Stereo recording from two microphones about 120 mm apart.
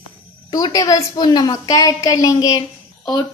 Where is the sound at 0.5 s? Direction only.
30° left (ahead or behind).